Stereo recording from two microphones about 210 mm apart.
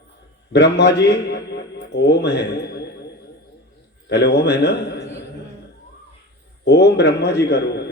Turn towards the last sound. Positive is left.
turn(degrees=50)  # may be behind; listen again after turning